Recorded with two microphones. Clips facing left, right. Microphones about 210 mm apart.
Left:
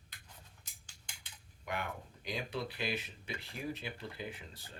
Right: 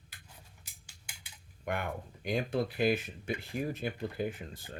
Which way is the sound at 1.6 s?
55° right (ahead or behind).